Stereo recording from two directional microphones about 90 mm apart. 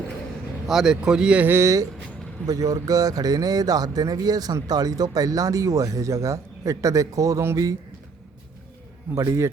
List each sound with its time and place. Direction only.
0.7 s speech: 5° right (ahead or behind)
1.5 s speech: 30° right (ahead or behind)
9.1 s speech: 35° right (ahead or behind)